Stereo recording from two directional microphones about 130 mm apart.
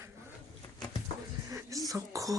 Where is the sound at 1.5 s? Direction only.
25° right (ahead or behind).